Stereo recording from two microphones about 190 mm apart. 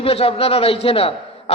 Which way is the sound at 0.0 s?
30° left (ahead or behind).